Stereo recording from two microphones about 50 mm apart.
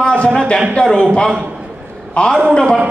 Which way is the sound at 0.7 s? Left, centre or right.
Centre.